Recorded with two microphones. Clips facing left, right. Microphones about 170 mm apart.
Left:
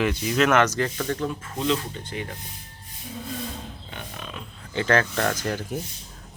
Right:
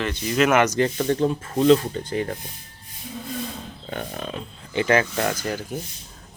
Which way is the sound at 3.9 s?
45° right (ahead or behind).